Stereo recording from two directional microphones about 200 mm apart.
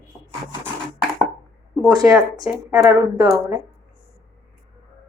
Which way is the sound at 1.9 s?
15° right (ahead or behind).